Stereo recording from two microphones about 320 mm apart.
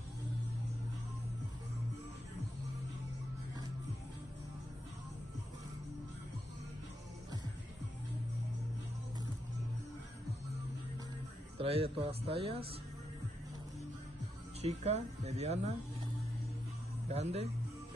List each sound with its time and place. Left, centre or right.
11.5 s speech: centre
14.6 s speech: centre
17.1 s speech: centre